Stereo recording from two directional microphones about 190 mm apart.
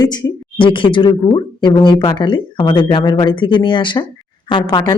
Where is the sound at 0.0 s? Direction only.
20° left (ahead or behind).